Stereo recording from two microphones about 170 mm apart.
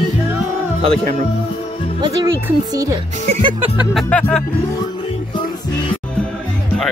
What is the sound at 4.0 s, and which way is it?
Music, 5° left (ahead or behind).